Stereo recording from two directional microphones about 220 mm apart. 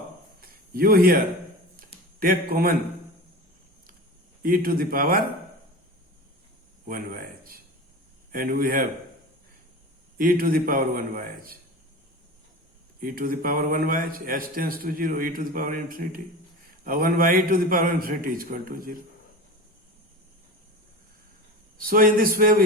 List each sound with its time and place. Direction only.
0.4 s a sound: 40° right (ahead or behind)
2.1 s a man's voice: 40° right (ahead or behind)
4.4 s a man's voice: 40° right (ahead or behind)
6.8 s a man's voice: 40° right (ahead or behind)
10.2 s a man's voice: 40° right (ahead or behind)
13.0 s a man's voice: 40° right (ahead or behind)
21.8 s a man's voice: 40° right (ahead or behind)